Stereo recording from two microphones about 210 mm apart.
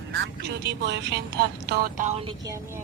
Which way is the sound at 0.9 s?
55° right (ahead or behind).